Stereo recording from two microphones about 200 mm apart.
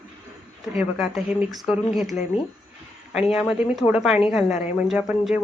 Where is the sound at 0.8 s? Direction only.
Centre (ahead or behind).